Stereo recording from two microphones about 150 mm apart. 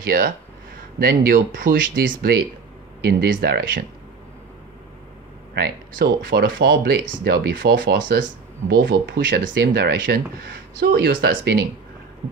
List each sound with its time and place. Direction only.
0.0 s speech: 90° right
6.3 s speech: 90° right